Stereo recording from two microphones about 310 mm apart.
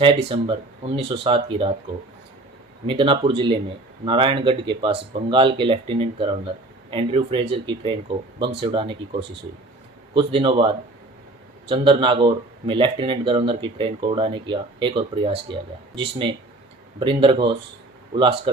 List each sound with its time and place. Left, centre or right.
0.0 s speech: centre
2.8 s speech: centre
10.2 s speech: centre
11.7 s speech: centre